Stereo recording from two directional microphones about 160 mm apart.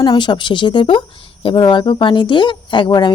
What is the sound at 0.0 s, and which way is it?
Speech, 30° left (ahead or behind).